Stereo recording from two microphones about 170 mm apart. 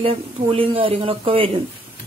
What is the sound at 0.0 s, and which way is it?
A woman's voice, 35° right (ahead or behind).